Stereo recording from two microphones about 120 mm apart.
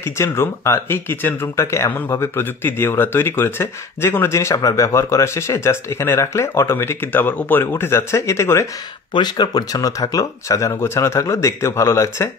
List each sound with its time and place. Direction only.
0.0 s speech: 20° left (ahead or behind)
9.1 s speech: 35° left (ahead or behind)